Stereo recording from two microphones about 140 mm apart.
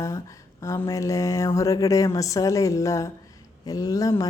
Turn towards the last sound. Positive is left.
turn(degrees=25)  # may be behind; listen again after turning